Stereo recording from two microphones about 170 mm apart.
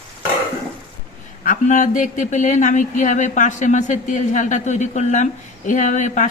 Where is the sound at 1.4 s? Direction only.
45° left (ahead or behind).